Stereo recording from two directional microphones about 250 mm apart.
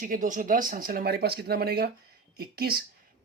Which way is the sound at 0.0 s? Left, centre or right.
Right.